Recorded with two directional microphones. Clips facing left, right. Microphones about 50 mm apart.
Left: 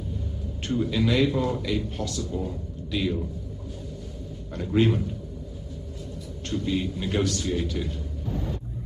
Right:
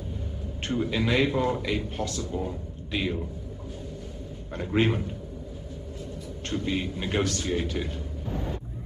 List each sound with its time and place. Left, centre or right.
0.6 s a man's voice: right
4.5 s a man's voice: right
6.4 s a man's voice: right